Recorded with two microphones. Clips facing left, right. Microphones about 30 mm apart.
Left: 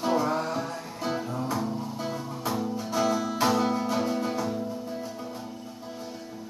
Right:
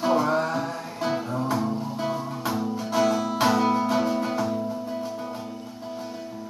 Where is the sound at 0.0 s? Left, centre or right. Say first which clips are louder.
Right 4 dB; right.